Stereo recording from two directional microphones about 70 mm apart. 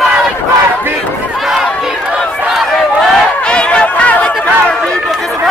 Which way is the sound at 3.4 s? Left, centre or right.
Centre.